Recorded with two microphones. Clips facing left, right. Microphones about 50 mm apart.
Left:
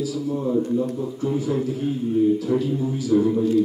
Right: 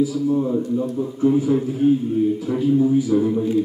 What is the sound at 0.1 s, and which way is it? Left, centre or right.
A man's voice, centre.